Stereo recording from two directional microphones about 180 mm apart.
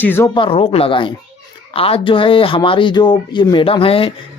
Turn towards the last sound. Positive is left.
turn(degrees=30)  # may be behind; listen again after turning